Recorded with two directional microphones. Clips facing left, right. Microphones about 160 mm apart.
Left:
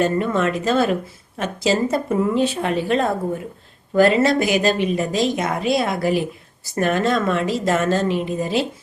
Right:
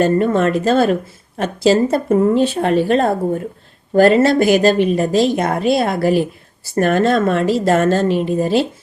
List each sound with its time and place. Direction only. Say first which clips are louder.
0.0 s a woman's voice: right 5 dB; 45° right (ahead or behind)
1.4 s speech: right 6 dB; 35° right (ahead or behind)
3.0 s a woman's voice: right 5 dB; 55° right (ahead or behind)
4.2 s speech: right 5 dB; 30° right (ahead or behind)
5.3 s a woman's voice: right 4 dB; 60° right (ahead or behind)
6.0 s a woman's voice: right 5 dB; 35° right (ahead or behind)